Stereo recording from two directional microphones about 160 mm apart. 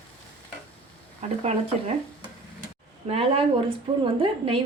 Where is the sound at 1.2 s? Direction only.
40° right (ahead or behind).